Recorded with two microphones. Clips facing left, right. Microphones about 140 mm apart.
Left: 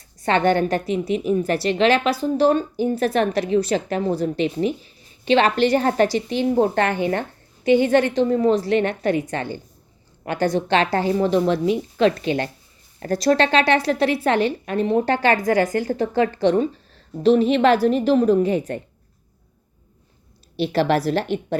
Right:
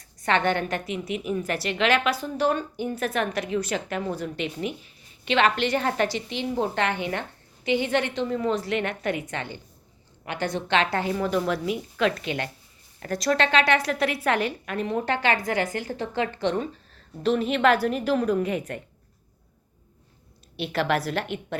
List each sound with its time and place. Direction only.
0.2 s a woman's voice: 35° left (ahead or behind)
20.6 s a woman's voice: 35° left (ahead or behind)